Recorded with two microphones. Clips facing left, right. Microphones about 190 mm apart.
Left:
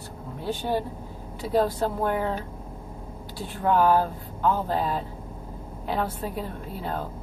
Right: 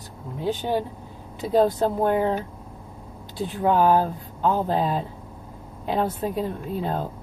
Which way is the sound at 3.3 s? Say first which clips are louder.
Right 2 dB; 20° right (ahead or behind).